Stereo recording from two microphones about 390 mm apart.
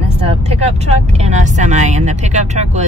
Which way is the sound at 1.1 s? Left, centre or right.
Centre.